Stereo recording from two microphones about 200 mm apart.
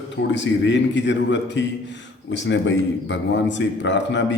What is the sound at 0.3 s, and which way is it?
A man's voice, 65° left (ahead or behind).